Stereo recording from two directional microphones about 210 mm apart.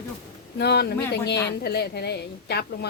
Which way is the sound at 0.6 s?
50° left (ahead or behind).